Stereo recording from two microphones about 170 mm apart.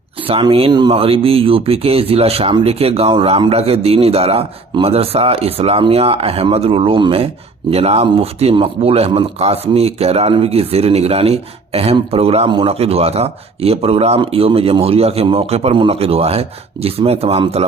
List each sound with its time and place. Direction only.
0.3 s speech: 35° right (ahead or behind)